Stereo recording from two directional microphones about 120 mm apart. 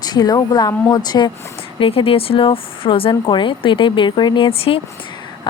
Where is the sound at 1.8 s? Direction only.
50° left (ahead or behind).